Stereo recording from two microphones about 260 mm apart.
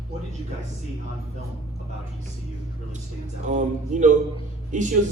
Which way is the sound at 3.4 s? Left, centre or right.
Right.